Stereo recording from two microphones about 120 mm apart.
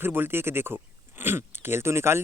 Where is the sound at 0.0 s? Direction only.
20° right (ahead or behind).